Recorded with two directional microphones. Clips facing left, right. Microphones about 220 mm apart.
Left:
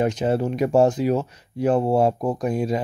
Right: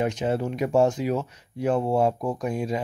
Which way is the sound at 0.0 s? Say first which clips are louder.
Left 4 dB; 40° left (ahead or behind).